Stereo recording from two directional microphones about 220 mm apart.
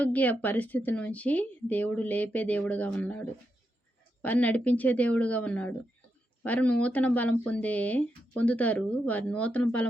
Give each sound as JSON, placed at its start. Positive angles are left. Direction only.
{"t": 0.0, "sound": "a woman's voice", "side_deg": 5}